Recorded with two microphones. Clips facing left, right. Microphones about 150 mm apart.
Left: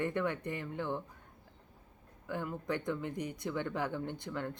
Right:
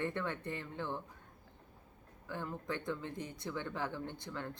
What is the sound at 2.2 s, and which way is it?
Speech, 15° left (ahead or behind).